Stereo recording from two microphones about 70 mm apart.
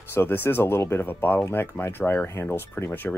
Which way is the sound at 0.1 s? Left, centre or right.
Left.